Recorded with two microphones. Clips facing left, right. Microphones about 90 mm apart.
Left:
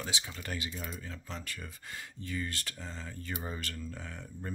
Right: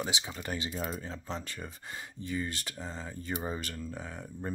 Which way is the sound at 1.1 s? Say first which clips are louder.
Right 4 dB; 25° right (ahead or behind).